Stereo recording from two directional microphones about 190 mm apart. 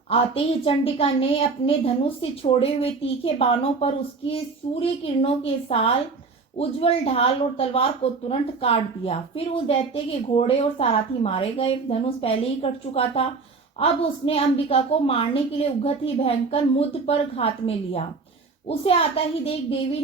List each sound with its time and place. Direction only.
0.1 s a woman's voice: 30° left (ahead or behind)